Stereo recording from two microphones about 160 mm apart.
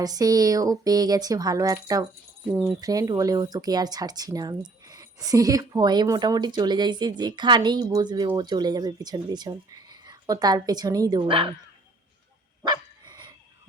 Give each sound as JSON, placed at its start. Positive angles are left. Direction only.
{"t": 0.0, "sound": "speech", "side_deg": -25}
{"t": 2.5, "sound": "speech", "side_deg": -10}
{"t": 2.8, "sound": "speech", "side_deg": -20}
{"t": 12.6, "sound": "dog", "side_deg": -25}